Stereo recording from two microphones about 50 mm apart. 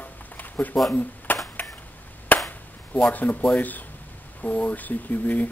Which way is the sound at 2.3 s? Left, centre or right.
Left.